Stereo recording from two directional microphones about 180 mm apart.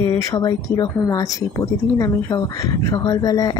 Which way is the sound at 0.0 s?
15° left (ahead or behind).